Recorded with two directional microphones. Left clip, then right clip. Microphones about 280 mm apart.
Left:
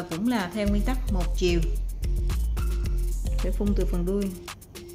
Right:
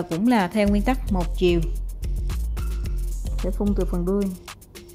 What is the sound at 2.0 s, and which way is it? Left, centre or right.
Music, centre.